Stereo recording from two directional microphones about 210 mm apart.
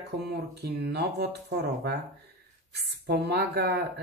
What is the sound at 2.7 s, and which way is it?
Speech, 50° right (ahead or behind).